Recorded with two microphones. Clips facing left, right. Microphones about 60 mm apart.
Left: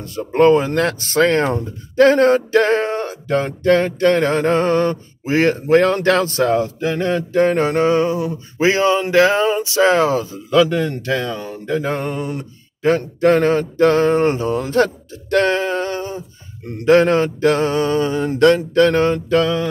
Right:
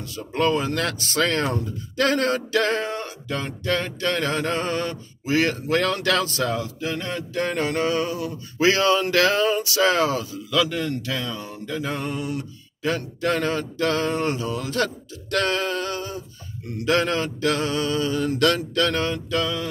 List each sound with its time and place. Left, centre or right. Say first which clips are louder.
0.0 s speech: left 9 dB; left